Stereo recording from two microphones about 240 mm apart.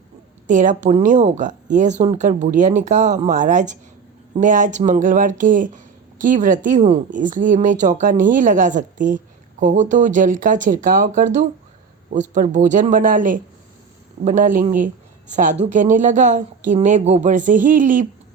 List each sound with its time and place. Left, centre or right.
0.4 s a woman's voice: right